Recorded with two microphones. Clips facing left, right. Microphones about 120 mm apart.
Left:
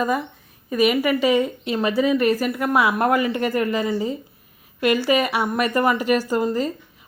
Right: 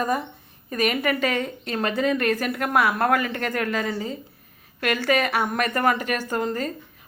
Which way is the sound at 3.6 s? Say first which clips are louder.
Left 2 dB; 60° right (ahead or behind).